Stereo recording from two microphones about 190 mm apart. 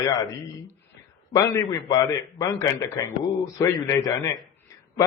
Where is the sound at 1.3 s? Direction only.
15° left (ahead or behind).